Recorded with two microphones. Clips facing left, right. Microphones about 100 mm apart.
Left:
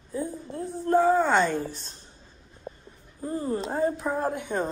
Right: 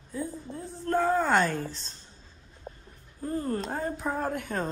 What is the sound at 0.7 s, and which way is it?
Speech, 15° left (ahead or behind).